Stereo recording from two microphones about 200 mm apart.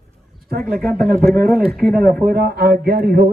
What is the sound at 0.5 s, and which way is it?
Speech, 50° right (ahead or behind).